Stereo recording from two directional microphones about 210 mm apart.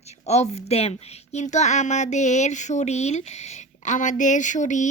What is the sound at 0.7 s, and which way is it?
Speech, 30° left (ahead or behind).